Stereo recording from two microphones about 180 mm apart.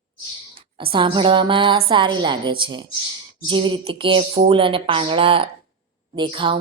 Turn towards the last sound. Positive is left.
turn(degrees=-30)  # may be behind; listen again after turning